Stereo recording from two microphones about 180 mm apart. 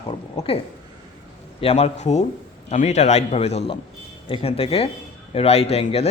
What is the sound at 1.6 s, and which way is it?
A man's voice, 35° left (ahead or behind).